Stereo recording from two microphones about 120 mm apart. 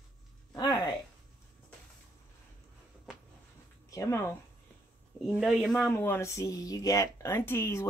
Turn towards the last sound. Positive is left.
turn(degrees=20)  # may be behind; listen again after turning